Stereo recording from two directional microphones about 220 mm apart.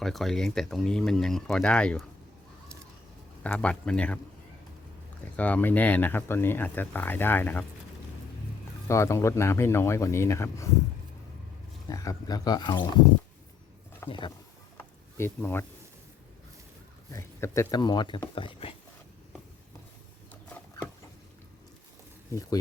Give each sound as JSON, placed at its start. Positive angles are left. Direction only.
{"t": 0.0, "sound": "speech", "side_deg": 0}
{"t": 3.4, "sound": "speech", "side_deg": 5}
{"t": 5.4, "sound": "speech", "side_deg": 5}
{"t": 8.9, "sound": "speech", "side_deg": 15}
{"t": 11.9, "sound": "speech", "side_deg": 15}
{"t": 14.1, "sound": "speech", "side_deg": 20}
{"t": 14.8, "sound": "a sound", "side_deg": 10}
{"t": 17.1, "sound": "speech", "side_deg": 15}
{"t": 22.3, "sound": "speech", "side_deg": 15}